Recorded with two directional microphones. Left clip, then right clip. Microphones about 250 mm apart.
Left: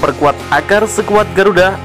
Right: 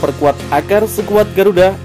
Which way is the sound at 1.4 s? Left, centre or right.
Centre.